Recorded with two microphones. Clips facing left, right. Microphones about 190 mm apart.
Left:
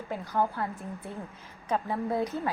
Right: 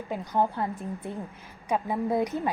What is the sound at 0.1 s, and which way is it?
A woman's voice, 15° right (ahead or behind).